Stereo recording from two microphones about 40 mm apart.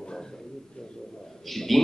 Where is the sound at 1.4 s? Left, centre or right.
Centre.